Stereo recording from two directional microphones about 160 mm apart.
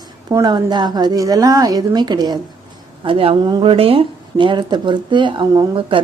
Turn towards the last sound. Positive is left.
turn(degrees=-30)  # may be behind; listen again after turning